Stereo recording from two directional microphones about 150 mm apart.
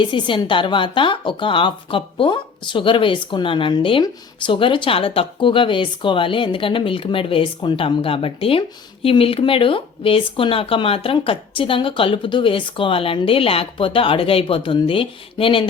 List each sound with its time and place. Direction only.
0.0 s a woman's voice: 35° left (ahead or behind)